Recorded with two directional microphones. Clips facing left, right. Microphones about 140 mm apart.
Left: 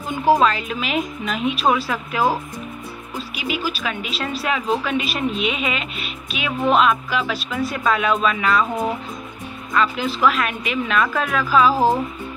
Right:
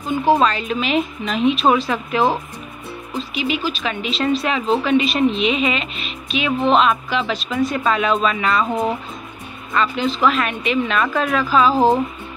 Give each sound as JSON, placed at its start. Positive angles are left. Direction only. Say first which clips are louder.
{"t": 0.2, "sound": "a woman's voice", "louder": "left 1 dB", "side_deg": 10}
{"t": 3.3, "sound": "a woman's voice", "louder": "right 3 dB", "side_deg": 5}
{"t": 9.8, "sound": "a woman's voice", "louder": "right 1 dB", "side_deg": 5}
{"t": 11.7, "sound": "speech", "louder": "right 3 dB", "side_deg": -20}